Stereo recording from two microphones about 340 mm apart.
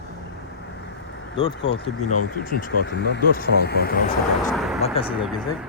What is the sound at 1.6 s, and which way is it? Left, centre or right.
Speech, left.